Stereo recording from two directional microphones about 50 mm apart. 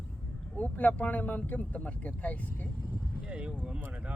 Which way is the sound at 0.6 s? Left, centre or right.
Left.